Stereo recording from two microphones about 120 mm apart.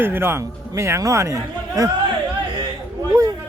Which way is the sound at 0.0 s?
20° right (ahead or behind).